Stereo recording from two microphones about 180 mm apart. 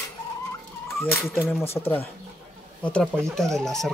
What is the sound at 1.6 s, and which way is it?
Speech, 35° left (ahead or behind).